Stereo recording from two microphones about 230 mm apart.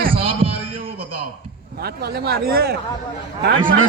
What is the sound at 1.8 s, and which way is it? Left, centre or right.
A man's voice, right.